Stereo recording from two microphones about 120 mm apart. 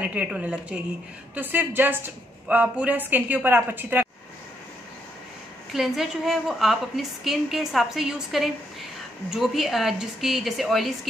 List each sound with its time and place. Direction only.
0.0 s a woman's voice: 10° right (ahead or behind)
5.7 s a woman's voice: centre (ahead or behind)